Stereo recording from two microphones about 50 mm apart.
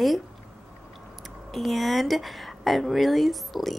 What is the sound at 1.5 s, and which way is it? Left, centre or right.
A woman's voice, centre.